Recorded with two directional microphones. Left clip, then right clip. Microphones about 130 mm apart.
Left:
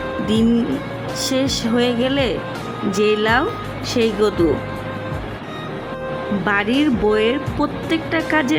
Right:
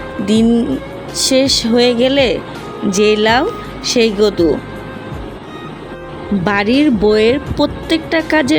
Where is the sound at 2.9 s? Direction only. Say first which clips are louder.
Right 5 dB; 50° right (ahead or behind).